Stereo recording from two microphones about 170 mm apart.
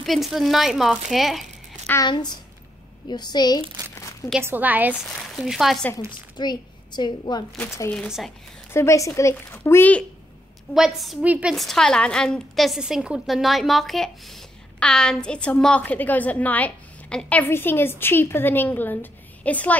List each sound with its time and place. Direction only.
0.0 s a woman's voice: centre (ahead or behind)
2.0 s a woman's voice: 25° left (ahead or behind)
4.4 s a woman's voice: 10° right (ahead or behind)
6.3 s a woman's voice: 25° left (ahead or behind)
7.5 s speech: 15° left (ahead or behind)
7.9 s a woman's voice: centre (ahead or behind)
8.7 s speech: 15° left (ahead or behind)
10.7 s a woman's voice: centre (ahead or behind)